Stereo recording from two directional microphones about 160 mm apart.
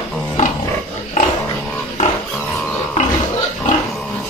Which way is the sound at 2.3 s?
5° left (ahead or behind).